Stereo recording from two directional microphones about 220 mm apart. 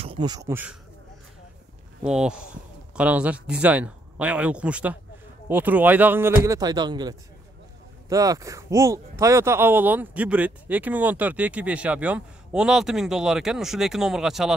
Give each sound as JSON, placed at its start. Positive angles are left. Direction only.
{"t": 0.0, "sound": "speech", "side_deg": -20}
{"t": 2.0, "sound": "speech", "side_deg": -5}